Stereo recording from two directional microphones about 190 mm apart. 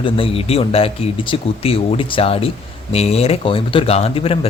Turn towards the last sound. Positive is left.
turn(degrees=30)  # may be behind; listen again after turning